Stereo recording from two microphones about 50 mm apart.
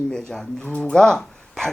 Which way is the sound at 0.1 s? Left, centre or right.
Centre.